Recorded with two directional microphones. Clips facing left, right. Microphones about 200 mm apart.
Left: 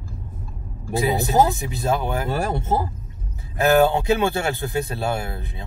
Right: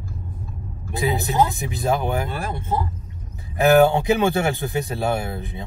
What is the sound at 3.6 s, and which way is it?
Speech, 15° right (ahead or behind).